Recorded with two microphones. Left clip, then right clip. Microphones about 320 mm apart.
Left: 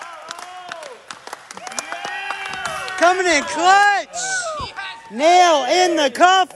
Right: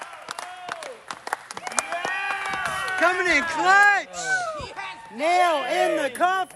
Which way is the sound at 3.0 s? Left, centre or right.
Centre.